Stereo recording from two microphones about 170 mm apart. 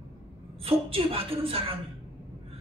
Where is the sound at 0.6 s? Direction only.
35° right (ahead or behind).